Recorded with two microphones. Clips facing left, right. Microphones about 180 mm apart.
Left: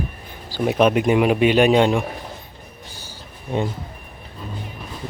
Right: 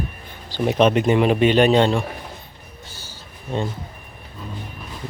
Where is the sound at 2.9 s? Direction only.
15° left (ahead or behind).